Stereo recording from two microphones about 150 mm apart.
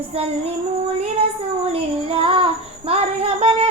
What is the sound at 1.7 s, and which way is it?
Child singing, 40° right (ahead or behind).